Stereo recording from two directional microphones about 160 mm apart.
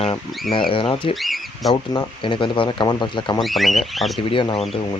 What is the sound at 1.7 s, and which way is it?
Speech, 30° left (ahead or behind).